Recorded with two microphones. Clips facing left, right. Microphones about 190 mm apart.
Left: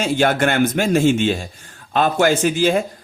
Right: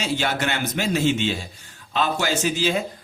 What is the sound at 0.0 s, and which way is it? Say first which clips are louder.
Speech: left 7 dB; 50° left (ahead or behind).